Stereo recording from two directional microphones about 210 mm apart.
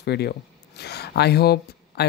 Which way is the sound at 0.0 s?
50° left (ahead or behind).